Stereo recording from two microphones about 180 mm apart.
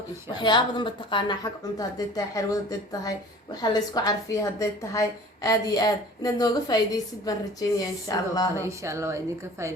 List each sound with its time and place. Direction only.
0.3 s speech: 25° left (ahead or behind)
8.5 s a woman's voice: 15° right (ahead or behind)